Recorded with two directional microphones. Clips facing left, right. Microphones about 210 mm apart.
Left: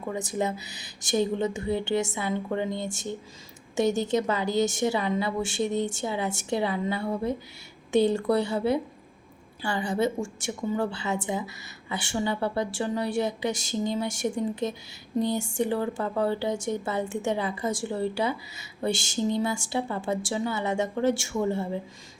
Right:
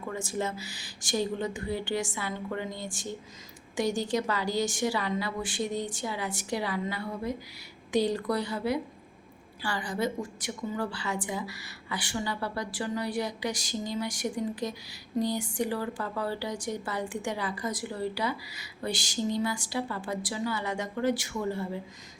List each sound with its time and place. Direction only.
0.1 s a woman's voice: 20° left (ahead or behind)